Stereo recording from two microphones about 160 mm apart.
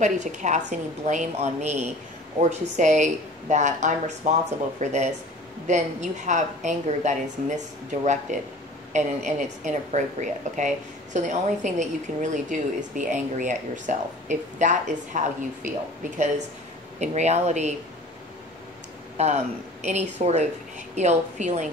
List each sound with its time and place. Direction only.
0.0 s a woman's voice: 50° right (ahead or behind)
19.1 s a woman's voice: 45° right (ahead or behind)